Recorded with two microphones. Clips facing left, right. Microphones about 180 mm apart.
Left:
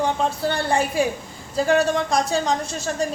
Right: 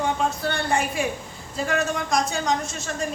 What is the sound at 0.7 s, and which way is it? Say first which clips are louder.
A woman's voice: left 4 dB; 35° left (ahead or behind).